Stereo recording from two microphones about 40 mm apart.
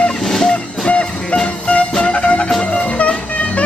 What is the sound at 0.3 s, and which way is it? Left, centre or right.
Train, centre.